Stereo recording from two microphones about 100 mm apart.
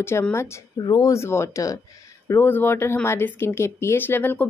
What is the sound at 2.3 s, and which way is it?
A woman's voice, 25° left (ahead or behind).